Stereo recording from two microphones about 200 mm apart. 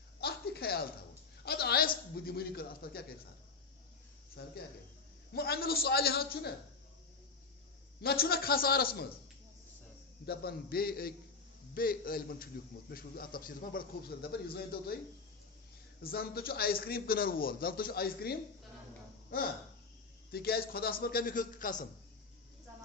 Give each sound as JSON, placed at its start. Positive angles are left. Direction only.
{"t": 0.2, "sound": "a sound", "side_deg": 50}
{"t": 1.5, "sound": "a man's voice", "side_deg": 50}
{"t": 4.4, "sound": "a man's voice", "side_deg": 55}
{"t": 8.0, "sound": "a man's voice", "side_deg": 50}
{"t": 10.2, "sound": "a man's voice", "side_deg": 50}
{"t": 16.0, "sound": "a man's voice", "side_deg": 50}
{"t": 20.3, "sound": "a man's voice", "side_deg": 50}